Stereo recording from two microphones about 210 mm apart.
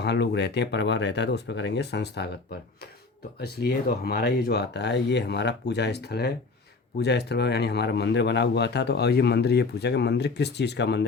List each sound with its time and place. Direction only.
0.0 s speech: 55° left (ahead or behind)
3.4 s speech: 45° left (ahead or behind)